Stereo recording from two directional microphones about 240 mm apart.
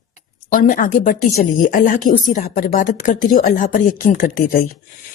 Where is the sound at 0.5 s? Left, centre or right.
Left.